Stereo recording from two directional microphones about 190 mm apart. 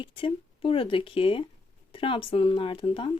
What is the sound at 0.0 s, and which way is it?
Speech, 25° left (ahead or behind).